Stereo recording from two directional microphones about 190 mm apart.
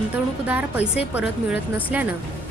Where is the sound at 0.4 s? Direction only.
10° right (ahead or behind).